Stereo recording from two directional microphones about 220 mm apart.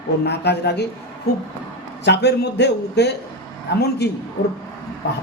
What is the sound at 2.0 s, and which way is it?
A man's voice, 50° left (ahead or behind).